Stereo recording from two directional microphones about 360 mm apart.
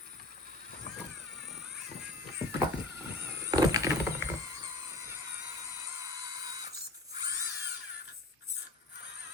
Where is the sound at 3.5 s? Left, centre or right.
Centre.